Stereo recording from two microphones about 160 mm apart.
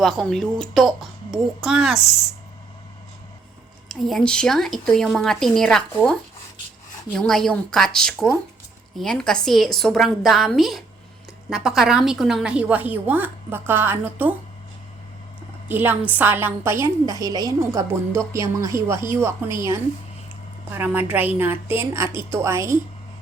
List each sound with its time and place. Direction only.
0.0 s speech: centre (ahead or behind)
3.8 s a woman's voice: centre (ahead or behind)
15.7 s a woman's voice: 10° right (ahead or behind)
20.7 s a woman's voice: 10° right (ahead or behind)